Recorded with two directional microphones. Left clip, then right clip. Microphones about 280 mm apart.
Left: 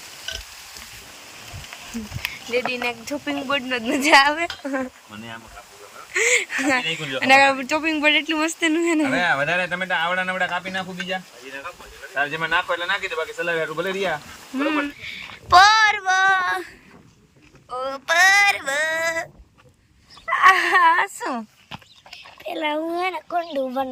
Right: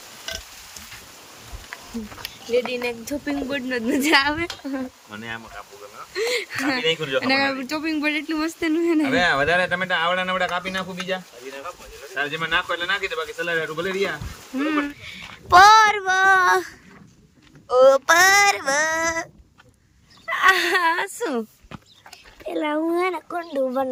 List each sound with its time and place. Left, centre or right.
2.2 s speech: centre
12.1 s speech: centre
14.5 s child singing: centre
14.8 s a child's voice: centre
17.7 s child singing: right; by 19.3 s centre
20.2 s speech: centre